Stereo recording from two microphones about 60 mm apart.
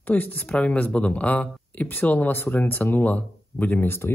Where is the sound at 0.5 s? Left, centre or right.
Centre.